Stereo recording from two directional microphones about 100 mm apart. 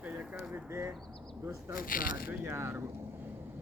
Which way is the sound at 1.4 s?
30° right (ahead or behind).